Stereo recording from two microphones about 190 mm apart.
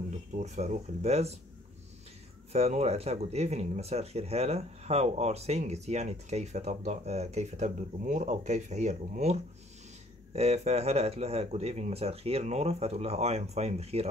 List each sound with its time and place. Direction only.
0.3 s speech: 35° right (ahead or behind)
2.5 s speech: 35° right (ahead or behind)